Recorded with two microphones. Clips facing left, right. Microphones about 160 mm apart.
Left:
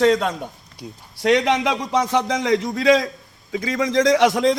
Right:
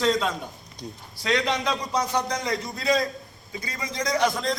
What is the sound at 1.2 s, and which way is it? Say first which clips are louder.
A man's voice: left 7 dB; 80° left.